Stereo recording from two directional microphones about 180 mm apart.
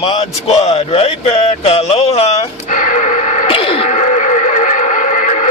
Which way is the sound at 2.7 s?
45° left (ahead or behind).